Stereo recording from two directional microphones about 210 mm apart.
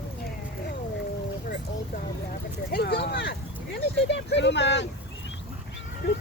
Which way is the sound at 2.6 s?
50° left (ahead or behind).